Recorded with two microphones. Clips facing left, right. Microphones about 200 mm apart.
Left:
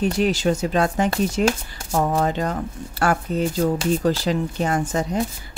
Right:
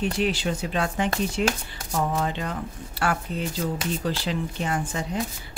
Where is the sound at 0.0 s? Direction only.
45° left (ahead or behind).